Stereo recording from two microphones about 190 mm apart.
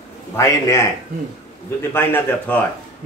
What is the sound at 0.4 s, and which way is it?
Speech, 15° left (ahead or behind).